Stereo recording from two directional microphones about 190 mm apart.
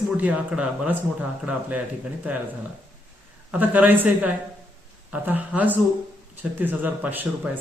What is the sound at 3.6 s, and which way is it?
Speech, 10° right (ahead or behind).